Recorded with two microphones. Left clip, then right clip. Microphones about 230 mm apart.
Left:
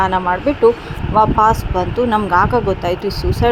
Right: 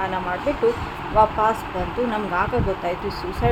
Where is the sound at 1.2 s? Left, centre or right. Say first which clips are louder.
Left 6 dB; left.